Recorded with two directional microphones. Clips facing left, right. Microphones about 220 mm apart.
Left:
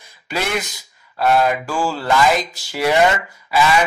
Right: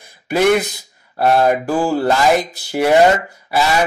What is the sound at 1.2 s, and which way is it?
Speech, 35° right (ahead or behind).